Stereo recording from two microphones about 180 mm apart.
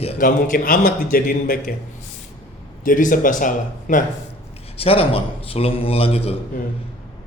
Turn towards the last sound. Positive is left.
turn(degrees=35)  # may be behind; listen again after turning